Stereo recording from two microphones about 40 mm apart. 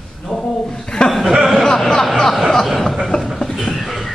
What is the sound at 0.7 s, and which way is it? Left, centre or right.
Chuckle, centre.